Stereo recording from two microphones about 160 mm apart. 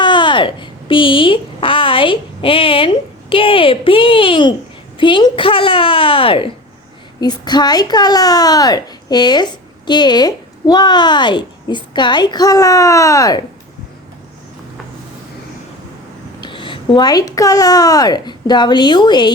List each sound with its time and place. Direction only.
0.0 s a sound: 30° left (ahead or behind)
7.2 s a woman's voice: 25° left (ahead or behind)
16.4 s a woman's voice: 30° left (ahead or behind)